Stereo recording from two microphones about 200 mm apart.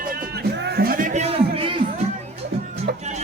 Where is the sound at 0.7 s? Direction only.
45° right (ahead or behind).